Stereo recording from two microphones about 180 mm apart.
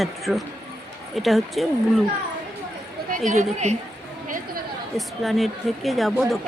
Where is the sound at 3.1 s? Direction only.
40° right (ahead or behind).